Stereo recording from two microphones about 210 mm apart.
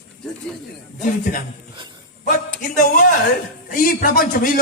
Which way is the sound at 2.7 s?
40° left (ahead or behind).